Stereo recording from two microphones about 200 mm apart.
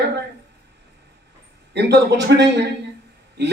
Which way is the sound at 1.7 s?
60° right (ahead or behind).